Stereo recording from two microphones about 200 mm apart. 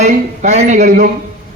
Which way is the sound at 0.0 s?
35° right (ahead or behind).